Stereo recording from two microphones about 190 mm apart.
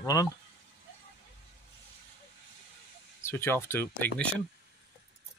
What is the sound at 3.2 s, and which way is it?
Speech, 10° left (ahead or behind).